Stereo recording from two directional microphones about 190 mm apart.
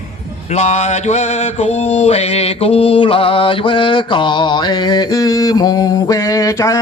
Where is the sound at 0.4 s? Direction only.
35° left (ahead or behind).